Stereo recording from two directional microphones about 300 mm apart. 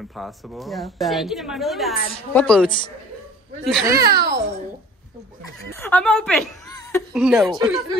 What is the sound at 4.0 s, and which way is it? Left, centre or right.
Speech, right.